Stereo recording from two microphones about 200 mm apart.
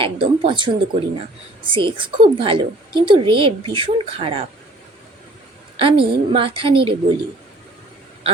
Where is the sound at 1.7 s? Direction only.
25° right (ahead or behind).